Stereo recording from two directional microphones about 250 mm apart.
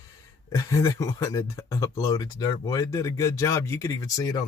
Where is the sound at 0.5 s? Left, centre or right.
Centre.